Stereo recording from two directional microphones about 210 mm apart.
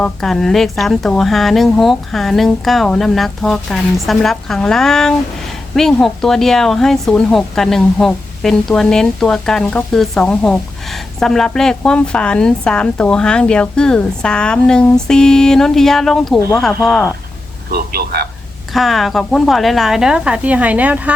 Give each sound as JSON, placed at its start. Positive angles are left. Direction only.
{"t": 0.0, "sound": "speech", "side_deg": 0}
{"t": 17.7, "sound": "speech", "side_deg": -45}
{"t": 18.7, "sound": "speech", "side_deg": 0}